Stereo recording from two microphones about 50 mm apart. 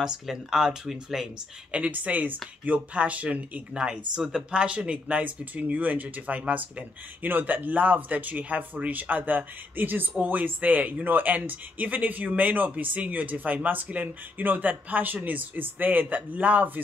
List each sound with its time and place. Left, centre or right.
0.0 s speech: centre
1.7 s speech: right